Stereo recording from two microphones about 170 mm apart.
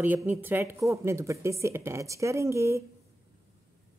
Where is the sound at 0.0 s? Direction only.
10° right (ahead or behind).